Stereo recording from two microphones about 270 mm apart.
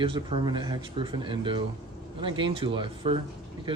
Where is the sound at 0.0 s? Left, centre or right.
Centre.